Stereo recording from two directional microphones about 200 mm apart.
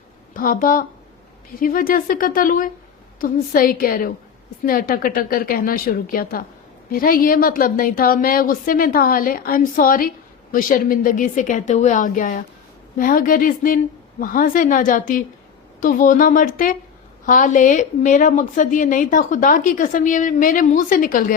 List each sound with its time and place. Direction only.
0.3 s a woman's voice: 45° left (ahead or behind)